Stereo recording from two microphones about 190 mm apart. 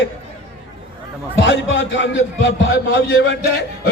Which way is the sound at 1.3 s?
80° left.